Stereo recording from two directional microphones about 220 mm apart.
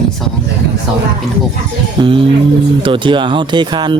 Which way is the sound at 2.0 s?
20° right (ahead or behind).